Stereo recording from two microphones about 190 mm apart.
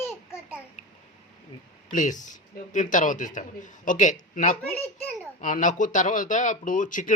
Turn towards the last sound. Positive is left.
turn(degrees=45)  # may be behind; listen again after turning